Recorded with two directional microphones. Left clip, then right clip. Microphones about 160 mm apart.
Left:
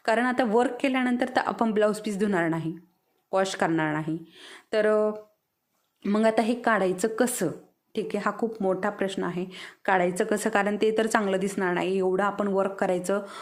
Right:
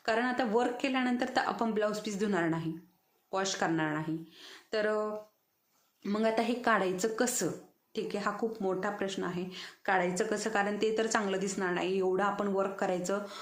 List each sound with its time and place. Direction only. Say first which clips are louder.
0.0 s a woman's voice: left 6 dB; 45° left (ahead or behind)